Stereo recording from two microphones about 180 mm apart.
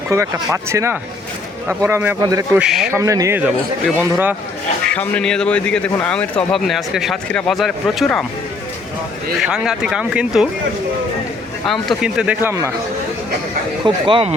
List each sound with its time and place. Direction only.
0.1 s a man's voice: 15° right (ahead or behind)
2.6 s speech: 5° right (ahead or behind)
2.9 s a man's voice: 20° right (ahead or behind)
4.9 s speech: 5° left (ahead or behind)
9.4 s speech: 5° right (ahead or behind)
11.6 s speech: centre (ahead or behind)
13.8 s speech: 25° right (ahead or behind)